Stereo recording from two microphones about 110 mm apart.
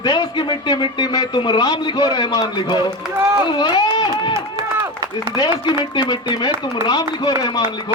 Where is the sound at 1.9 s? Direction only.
45° left (ahead or behind).